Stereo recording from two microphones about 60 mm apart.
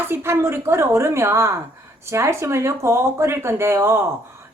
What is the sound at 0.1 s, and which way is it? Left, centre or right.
A woman's voice, right.